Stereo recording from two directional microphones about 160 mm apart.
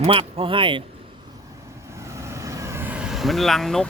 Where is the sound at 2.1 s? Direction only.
20° right (ahead or behind); by 3.8 s centre (ahead or behind).